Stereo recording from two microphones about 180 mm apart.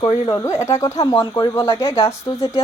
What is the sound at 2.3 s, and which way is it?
Speech, 25° left (ahead or behind).